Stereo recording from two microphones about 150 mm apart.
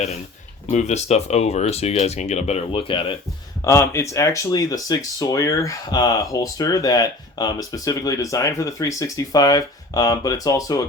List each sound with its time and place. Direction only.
0.7 s speech: 50° left (ahead or behind)
3.6 s speech: 20° left (ahead or behind)